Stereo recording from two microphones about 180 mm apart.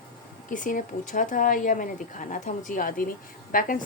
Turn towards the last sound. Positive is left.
turn(degrees=50)  # may be behind; listen again after turning